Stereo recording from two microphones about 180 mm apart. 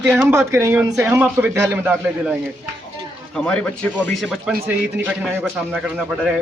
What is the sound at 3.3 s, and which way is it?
Speech, 5° left (ahead or behind).